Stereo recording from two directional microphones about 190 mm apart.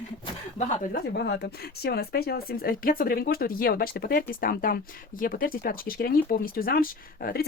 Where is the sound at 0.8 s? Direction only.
60° left (ahead or behind).